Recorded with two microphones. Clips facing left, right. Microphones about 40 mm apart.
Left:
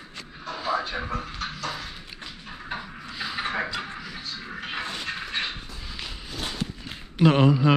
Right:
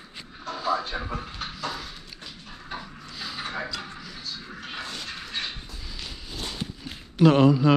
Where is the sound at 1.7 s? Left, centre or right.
Centre; by 4.0 s left.